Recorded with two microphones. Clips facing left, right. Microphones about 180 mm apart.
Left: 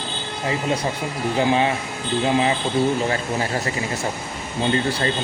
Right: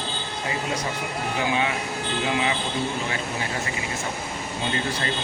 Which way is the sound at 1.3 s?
35° left (ahead or behind).